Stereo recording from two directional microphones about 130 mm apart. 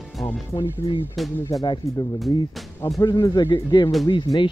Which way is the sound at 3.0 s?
30° left (ahead or behind).